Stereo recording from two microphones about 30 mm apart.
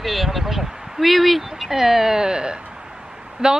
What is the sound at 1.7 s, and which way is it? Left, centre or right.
Speech, centre.